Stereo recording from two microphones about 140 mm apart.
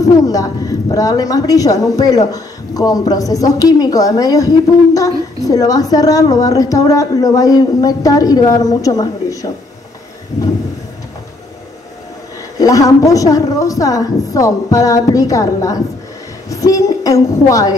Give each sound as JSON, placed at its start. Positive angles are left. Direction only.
{"t": 0.0, "sound": "a woman's voice", "side_deg": 25}
{"t": 12.5, "sound": "a woman's voice", "side_deg": 25}